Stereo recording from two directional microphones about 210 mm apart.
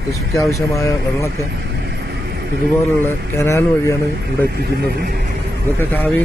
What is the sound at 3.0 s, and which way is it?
Speech, 10° left (ahead or behind).